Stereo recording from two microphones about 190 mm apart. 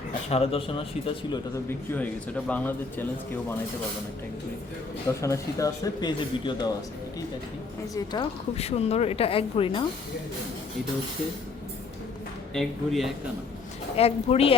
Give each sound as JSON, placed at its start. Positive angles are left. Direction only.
{"t": 0.3, "sound": "speech", "side_deg": 30}
{"t": 1.9, "sound": "a man's voice", "side_deg": 5}
{"t": 5.2, "sound": "speech", "side_deg": 15}
{"t": 7.9, "sound": "speech", "side_deg": 20}
{"t": 8.5, "sound": "speech", "side_deg": 35}
{"t": 12.5, "sound": "speech", "side_deg": 0}
{"t": 13.9, "sound": "speech", "side_deg": 30}